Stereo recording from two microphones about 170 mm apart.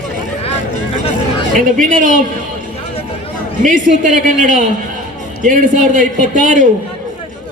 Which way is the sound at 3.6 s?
50° right (ahead or behind).